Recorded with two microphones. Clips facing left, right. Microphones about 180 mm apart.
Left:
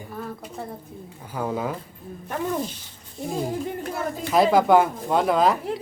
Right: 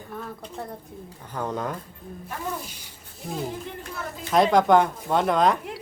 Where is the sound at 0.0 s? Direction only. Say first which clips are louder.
Left 2 dB; 5° left (ahead or behind).